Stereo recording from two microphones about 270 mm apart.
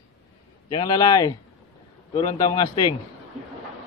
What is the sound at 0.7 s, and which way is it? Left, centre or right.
A man's voice, centre.